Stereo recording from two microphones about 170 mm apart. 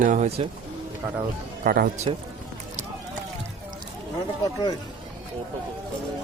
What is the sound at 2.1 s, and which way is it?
Speech, 35° right (ahead or behind).